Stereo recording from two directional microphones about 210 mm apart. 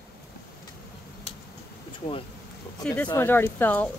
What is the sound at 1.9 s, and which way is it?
Speech, 25° left (ahead or behind).